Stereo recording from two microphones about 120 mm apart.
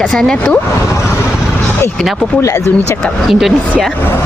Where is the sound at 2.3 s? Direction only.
25° left (ahead or behind).